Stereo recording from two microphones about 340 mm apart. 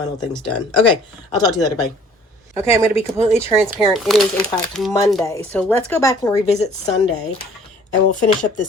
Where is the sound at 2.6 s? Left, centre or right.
Centre.